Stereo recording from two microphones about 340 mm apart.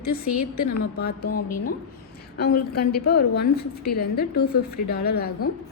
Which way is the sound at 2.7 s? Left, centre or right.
Left.